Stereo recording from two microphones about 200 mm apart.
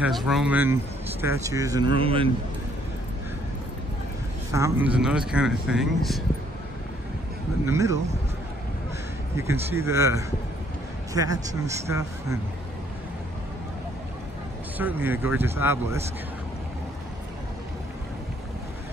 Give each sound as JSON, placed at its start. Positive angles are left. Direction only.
{"t": 0.0, "sound": "speech", "side_deg": 0}
{"t": 2.0, "sound": "speech", "side_deg": -25}
{"t": 4.5, "sound": "speech", "side_deg": -15}
{"t": 7.6, "sound": "speech", "side_deg": -15}
{"t": 9.4, "sound": "speech", "side_deg": -15}
{"t": 11.9, "sound": "speech", "side_deg": -15}
{"t": 14.8, "sound": "speech", "side_deg": -10}